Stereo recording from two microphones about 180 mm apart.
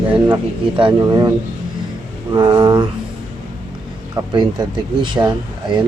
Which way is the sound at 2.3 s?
25° right (ahead or behind).